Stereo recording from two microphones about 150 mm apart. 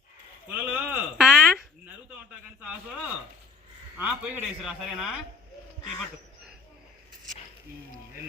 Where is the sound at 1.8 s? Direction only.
10° right (ahead or behind).